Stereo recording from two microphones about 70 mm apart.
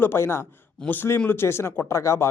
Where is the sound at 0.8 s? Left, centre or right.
Left.